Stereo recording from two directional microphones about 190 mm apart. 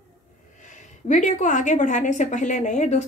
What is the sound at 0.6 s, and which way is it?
A woman's voice, 40° left (ahead or behind).